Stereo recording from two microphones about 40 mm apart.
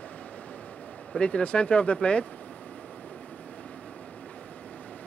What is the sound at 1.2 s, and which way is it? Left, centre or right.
Speech, left.